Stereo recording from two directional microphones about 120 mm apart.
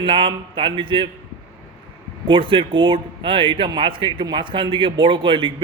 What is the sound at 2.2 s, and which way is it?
A man's voice, 45° right (ahead or behind).